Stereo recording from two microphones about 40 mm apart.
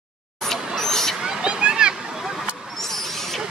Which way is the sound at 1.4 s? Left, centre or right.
Right.